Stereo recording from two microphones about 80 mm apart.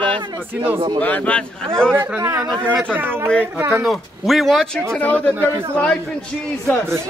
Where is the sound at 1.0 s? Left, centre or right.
Centre.